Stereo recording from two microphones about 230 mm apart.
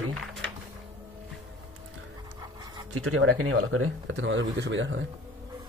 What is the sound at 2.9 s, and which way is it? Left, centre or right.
Speech, right.